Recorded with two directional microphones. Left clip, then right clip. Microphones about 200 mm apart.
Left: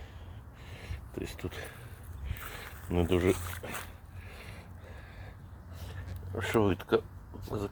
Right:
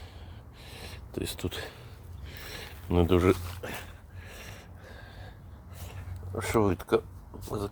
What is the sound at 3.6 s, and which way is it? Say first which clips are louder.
Speech: right 3 dB; 25° right (ahead or behind).